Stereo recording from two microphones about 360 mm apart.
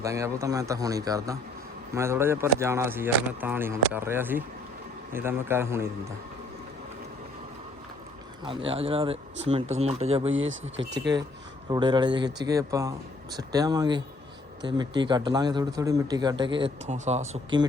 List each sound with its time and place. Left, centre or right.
0.0 s a man's voice: centre
8.4 s a man's voice: centre
10.3 s speech: right
11.7 s a man's voice: centre